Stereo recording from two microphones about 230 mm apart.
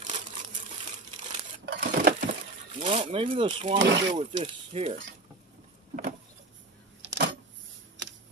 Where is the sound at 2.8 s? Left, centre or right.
Right.